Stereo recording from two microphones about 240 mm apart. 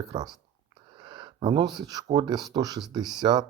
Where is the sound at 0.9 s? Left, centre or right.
Centre.